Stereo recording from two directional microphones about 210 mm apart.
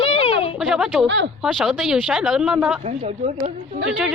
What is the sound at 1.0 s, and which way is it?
Speech, 60° right (ahead or behind).